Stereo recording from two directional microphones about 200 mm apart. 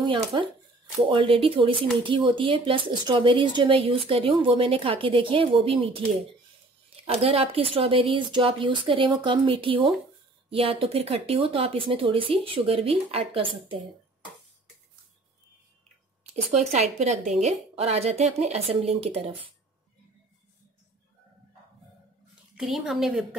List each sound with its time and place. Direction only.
0.0 s speech: 25° right (ahead or behind)
7.1 s speech: 30° right (ahead or behind)
16.7 s a woman's voice: 35° right (ahead or behind)
22.6 s a woman's voice: centre (ahead or behind)